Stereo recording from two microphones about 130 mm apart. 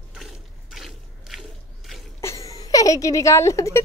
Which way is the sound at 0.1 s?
5° right (ahead or behind).